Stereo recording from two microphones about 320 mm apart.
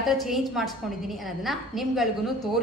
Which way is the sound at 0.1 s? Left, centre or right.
Centre.